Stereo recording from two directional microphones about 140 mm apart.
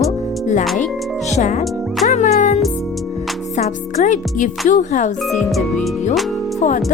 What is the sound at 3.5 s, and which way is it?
Speech, 60° left (ahead or behind).